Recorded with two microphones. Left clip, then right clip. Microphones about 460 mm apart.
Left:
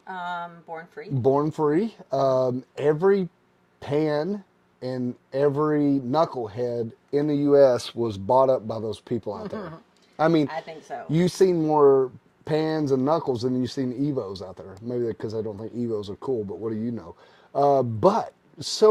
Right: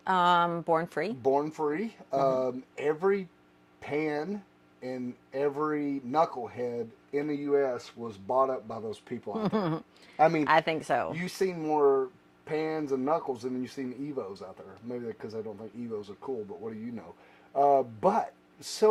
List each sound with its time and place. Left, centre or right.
0.0 s speech: right
1.3 s speech: left
9.4 s speech: right
10.2 s speech: left
10.4 s speech: right
11.3 s speech: left